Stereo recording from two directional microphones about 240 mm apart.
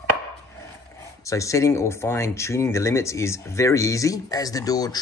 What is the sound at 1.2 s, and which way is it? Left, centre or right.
Speech, centre.